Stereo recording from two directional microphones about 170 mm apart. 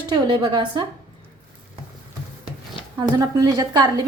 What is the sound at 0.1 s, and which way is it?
Speech, 25° right (ahead or behind).